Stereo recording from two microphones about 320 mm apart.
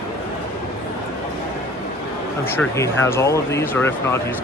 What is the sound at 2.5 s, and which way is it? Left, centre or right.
Speech, centre.